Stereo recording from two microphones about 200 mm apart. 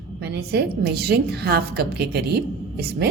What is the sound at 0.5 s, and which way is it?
A woman's voice, 50° right (ahead or behind).